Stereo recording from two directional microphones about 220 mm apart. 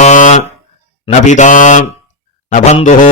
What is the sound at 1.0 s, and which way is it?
Mantra, 30° left (ahead or behind).